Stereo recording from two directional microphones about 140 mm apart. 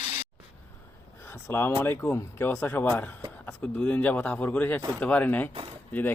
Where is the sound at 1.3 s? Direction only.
15° left (ahead or behind).